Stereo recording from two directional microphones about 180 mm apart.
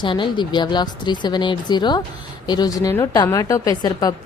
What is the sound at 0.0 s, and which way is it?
A woman's voice, 25° left (ahead or behind).